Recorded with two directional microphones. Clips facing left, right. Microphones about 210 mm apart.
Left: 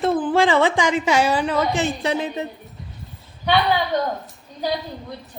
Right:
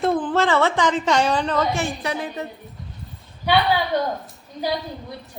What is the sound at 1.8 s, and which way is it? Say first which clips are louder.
Speech: left 4 dB; 25° left (ahead or behind).